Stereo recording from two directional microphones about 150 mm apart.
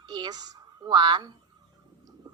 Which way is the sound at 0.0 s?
30° right (ahead or behind).